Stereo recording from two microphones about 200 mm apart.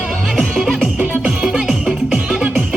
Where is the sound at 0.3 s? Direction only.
Centre (ahead or behind).